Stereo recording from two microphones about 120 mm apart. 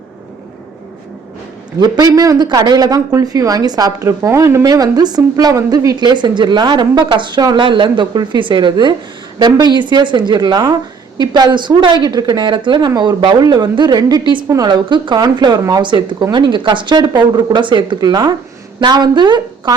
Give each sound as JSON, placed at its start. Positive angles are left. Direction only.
{"t": 1.8, "sound": "speech", "side_deg": -30}
{"t": 14.4, "sound": "a woman's voice", "side_deg": -25}
{"t": 14.7, "sound": "speech", "side_deg": -40}